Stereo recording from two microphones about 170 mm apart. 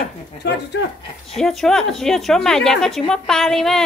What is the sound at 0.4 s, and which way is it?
Speech, 85° left.